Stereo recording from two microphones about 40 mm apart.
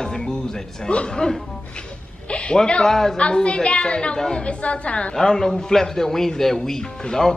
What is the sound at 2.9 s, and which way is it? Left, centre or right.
Speech, centre.